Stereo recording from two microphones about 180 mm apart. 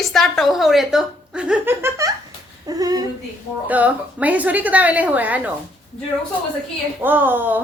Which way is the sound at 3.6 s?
10° right (ahead or behind).